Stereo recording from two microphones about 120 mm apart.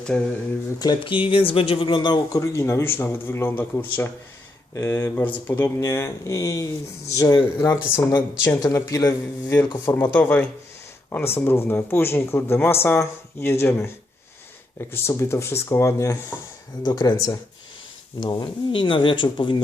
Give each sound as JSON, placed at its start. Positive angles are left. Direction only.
{"t": 0.1, "sound": "speech", "side_deg": 5}
{"t": 0.8, "sound": "speech", "side_deg": 40}
{"t": 2.4, "sound": "speech", "side_deg": 20}
{"t": 8.6, "sound": "speech", "side_deg": 30}
{"t": 16.8, "sound": "speech", "side_deg": 35}